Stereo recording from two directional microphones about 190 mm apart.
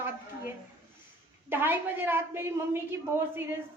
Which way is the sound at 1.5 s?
10° right (ahead or behind).